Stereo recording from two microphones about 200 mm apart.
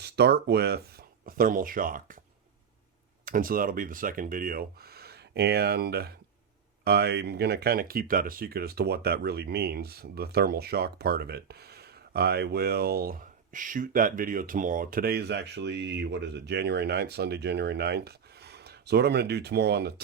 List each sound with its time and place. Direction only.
0.0 s speech: 55° right (ahead or behind)
3.2 s speech: 45° right (ahead or behind)